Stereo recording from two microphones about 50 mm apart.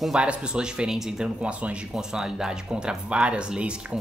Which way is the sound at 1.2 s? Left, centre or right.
Right.